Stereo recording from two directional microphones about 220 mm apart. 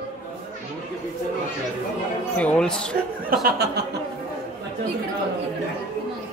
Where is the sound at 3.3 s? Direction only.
45° right (ahead or behind).